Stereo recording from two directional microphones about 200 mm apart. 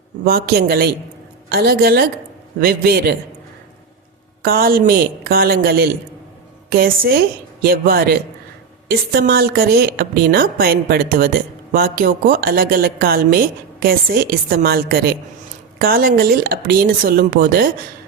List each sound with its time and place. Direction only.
0.3 s a woman's voice: 50° right (ahead or behind)
4.4 s a woman's voice: 50° right (ahead or behind)